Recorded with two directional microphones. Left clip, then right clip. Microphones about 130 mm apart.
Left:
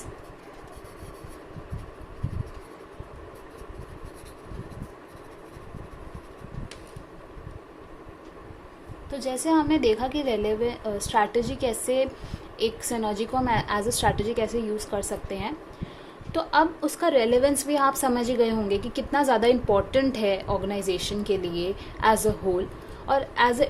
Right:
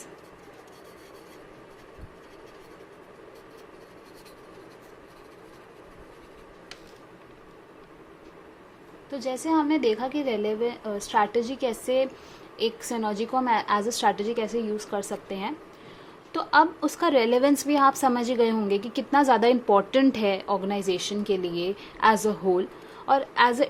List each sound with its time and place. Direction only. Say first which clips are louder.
9.1 s a woman's voice: left 1 dB; 35° right (ahead or behind)